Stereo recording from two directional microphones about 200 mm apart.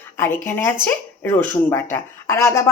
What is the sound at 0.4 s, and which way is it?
Speech, 10° left (ahead or behind).